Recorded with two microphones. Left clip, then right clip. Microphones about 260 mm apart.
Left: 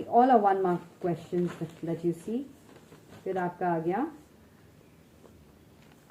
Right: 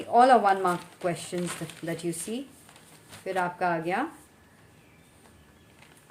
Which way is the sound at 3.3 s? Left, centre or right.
Right.